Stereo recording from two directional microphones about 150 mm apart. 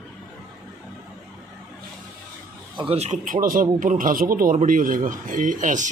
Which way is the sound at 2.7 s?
40° right (ahead or behind).